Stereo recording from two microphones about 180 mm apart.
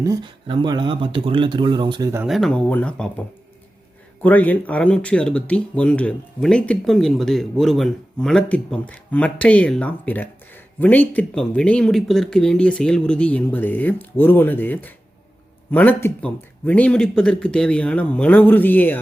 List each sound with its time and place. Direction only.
0.0 s speech: 20° right (ahead or behind)
2.2 s speech: centre (ahead or behind)